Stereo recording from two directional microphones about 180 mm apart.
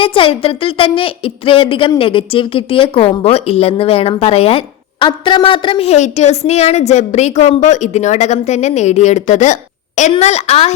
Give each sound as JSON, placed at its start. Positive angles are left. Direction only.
{"t": 0.0, "sound": "a woman's voice", "side_deg": 30}